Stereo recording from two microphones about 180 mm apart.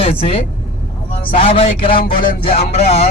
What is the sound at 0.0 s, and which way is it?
Speech, 35° left (ahead or behind).